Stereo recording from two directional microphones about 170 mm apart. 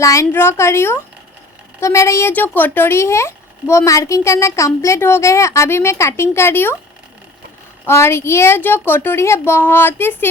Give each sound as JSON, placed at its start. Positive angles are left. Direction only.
{"t": 0.0, "sound": "speech", "side_deg": 20}
{"t": 7.9, "sound": "speech", "side_deg": 15}